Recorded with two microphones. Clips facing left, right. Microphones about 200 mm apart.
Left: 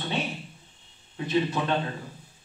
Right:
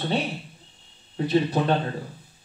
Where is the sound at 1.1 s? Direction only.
35° right (ahead or behind).